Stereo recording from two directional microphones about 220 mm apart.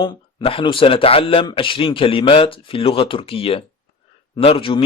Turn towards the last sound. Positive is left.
turn(degrees=25)  # may be behind; listen again after turning